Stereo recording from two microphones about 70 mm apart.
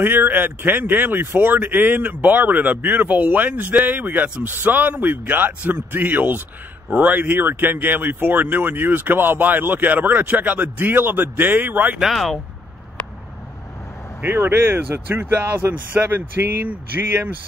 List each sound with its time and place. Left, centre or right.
0.0 s speech: right
12.0 s speech: centre
14.2 s speech: right